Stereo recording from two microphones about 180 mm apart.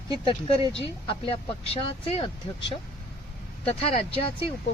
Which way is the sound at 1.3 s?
35° left (ahead or behind).